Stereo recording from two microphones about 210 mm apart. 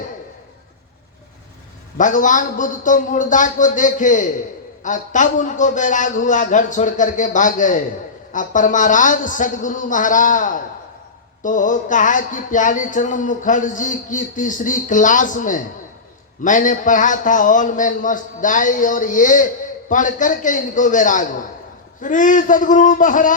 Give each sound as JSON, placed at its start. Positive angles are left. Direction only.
{"t": 2.0, "sound": "speech", "side_deg": 40}